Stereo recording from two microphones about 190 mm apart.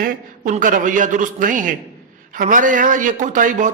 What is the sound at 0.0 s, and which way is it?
A man's voice, 45° right (ahead or behind).